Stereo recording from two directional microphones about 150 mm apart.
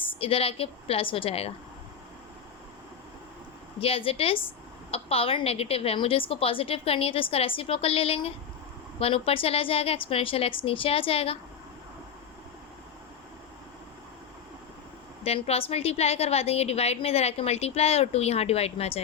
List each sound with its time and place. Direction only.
0.0 s a woman's voice: 35° left (ahead or behind)
3.8 s a woman's voice: 40° left (ahead or behind)
15.2 s a woman's voice: 45° left (ahead or behind)